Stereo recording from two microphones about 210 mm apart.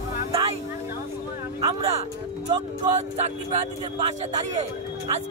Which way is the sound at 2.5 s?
25° right (ahead or behind).